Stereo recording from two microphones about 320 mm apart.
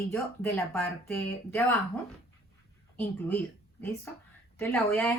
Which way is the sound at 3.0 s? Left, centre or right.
Centre.